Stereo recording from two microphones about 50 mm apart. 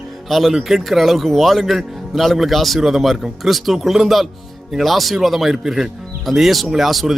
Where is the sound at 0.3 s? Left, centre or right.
Centre.